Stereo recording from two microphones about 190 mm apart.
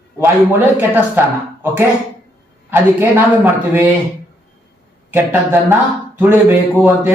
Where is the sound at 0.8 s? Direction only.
10° right (ahead or behind).